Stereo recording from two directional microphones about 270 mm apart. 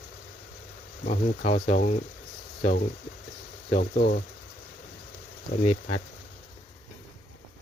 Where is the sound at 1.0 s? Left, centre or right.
Left.